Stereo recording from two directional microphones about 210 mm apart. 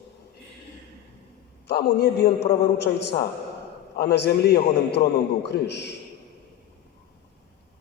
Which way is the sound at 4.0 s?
50° left (ahead or behind).